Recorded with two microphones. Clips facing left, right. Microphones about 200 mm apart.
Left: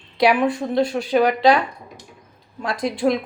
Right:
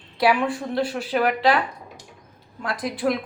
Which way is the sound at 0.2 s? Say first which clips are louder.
Left 3 dB; 20° left (ahead or behind).